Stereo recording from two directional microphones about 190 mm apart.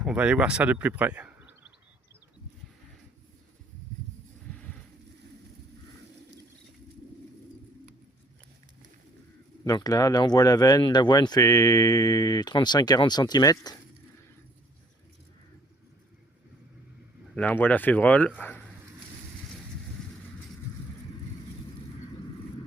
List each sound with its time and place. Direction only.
0.0 s speech: 5° right (ahead or behind)
4.5 s a sound: 5° left (ahead or behind)
9.6 s speech: 20° left (ahead or behind)
17.3 s speech: 10° left (ahead or behind)